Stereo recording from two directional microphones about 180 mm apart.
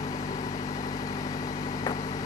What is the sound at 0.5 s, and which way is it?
Vehicle, 20° left (ahead or behind).